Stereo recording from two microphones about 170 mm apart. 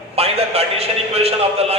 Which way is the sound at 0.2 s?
35° right (ahead or behind).